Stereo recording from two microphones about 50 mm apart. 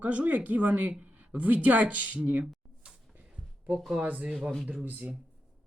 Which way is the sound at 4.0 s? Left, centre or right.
Right.